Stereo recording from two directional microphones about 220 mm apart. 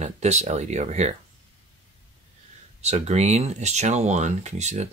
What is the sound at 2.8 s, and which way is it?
Speech, 30° right (ahead or behind).